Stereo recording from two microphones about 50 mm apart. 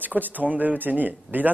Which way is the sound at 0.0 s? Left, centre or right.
Right.